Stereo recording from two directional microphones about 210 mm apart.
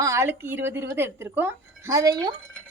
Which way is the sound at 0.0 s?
15° right (ahead or behind).